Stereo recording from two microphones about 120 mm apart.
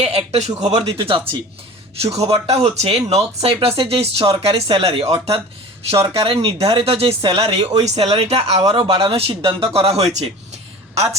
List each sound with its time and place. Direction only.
0.0 s speech: 60° right (ahead or behind)
2.0 s speech: 60° right (ahead or behind)